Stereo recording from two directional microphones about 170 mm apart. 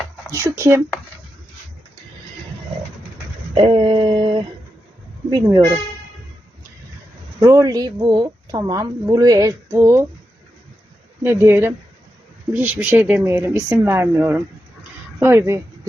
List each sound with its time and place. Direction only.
0.3 s speech: 15° right (ahead or behind)
3.5 s a sound: 30° right (ahead or behind)
5.4 s a woman's voice: 20° right (ahead or behind)
7.3 s a woman's voice: 20° right (ahead or behind)
11.2 s a woman's voice: 15° right (ahead or behind)